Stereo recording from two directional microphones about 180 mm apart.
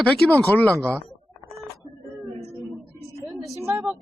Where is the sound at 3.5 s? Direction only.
15° right (ahead or behind).